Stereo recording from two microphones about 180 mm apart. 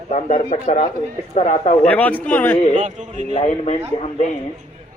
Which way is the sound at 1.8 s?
10° left (ahead or behind).